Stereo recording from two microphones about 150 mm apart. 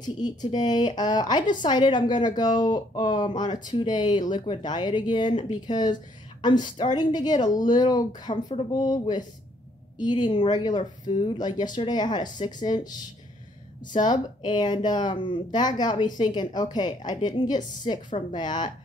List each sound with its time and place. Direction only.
0.0 s speech: 30° left (ahead or behind)
14.0 s speech: 30° left (ahead or behind)